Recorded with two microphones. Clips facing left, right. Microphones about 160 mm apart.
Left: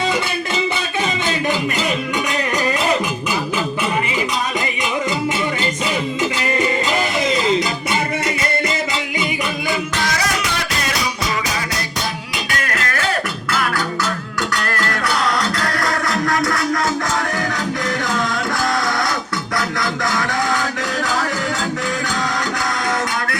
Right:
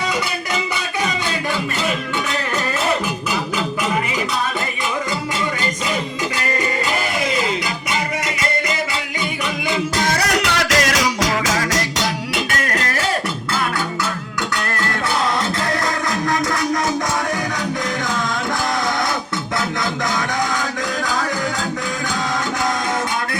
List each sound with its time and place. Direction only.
7.3 s music: 25° left (ahead or behind)
10.2 s music: 65° right (ahead or behind); by 12.0 s 90° right
12.5 s music: 40° right (ahead or behind)
14.6 s music: 20° right (ahead or behind)